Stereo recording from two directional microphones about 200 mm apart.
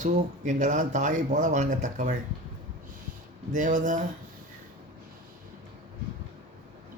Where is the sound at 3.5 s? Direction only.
40° right (ahead or behind).